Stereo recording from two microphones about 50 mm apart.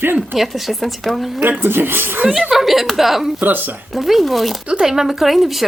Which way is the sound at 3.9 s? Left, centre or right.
Centre.